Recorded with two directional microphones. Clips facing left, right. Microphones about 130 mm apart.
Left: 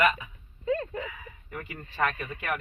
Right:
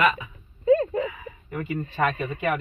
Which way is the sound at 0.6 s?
30° right (ahead or behind).